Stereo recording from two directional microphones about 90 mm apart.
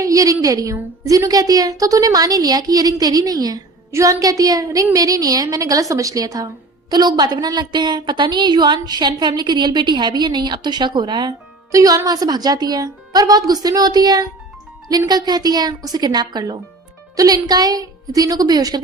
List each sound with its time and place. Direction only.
0.0 s a woman's voice: 40° right (ahead or behind)
6.9 s a woman's voice: 55° right (ahead or behind)
11.7 s a woman's voice: 40° right (ahead or behind)